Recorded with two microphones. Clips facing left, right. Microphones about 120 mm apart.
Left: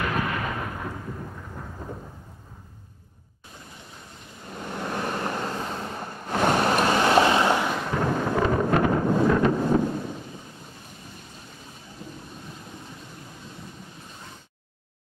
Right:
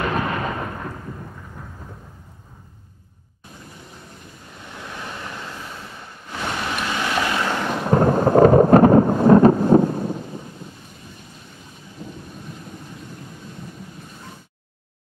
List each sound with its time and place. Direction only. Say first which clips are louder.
0.0 s thunder: right 4 dB; 35° right (ahead or behind)
0.7 s thunder: right 1 dB; centre (ahead or behind)
4.6 s vehicle: left 6 dB; 45° left (ahead or behind); by 7.6 s 20° left (ahead or behind)
7.9 s thunder: right 12 dB; 40° right (ahead or behind)